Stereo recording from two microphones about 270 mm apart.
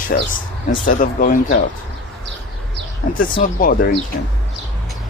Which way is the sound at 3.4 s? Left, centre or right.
Left.